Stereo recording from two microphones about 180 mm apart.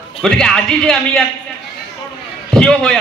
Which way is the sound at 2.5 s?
5° left (ahead or behind).